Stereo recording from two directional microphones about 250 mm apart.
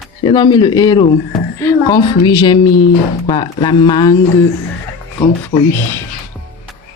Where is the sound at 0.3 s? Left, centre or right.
Centre.